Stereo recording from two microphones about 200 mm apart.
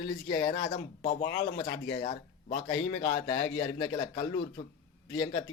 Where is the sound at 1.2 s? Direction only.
55° left (ahead or behind).